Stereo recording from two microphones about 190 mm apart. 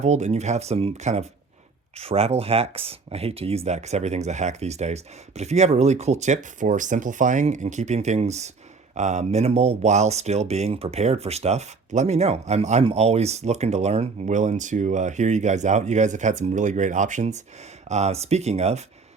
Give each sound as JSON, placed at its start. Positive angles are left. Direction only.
{"t": 0.0, "sound": "speech", "side_deg": -35}